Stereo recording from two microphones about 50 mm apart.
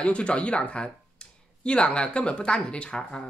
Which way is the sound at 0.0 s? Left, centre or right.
Left.